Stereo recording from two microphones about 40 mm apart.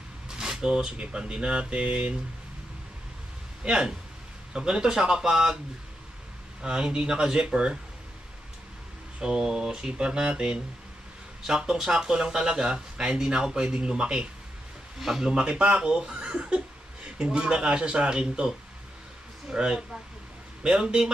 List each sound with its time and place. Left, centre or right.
0.3 s a sound: centre
1.0 s speech: right
3.6 s speech: right
6.6 s speech: right
9.2 s speech: centre
15.0 s speech: centre
15.3 s speech: right
19.5 s speech: right